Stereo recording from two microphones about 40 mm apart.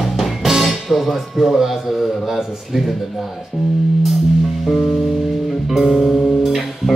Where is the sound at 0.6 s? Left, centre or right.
Centre.